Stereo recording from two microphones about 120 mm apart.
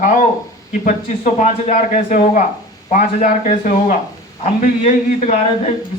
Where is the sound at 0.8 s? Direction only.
75° left (ahead or behind).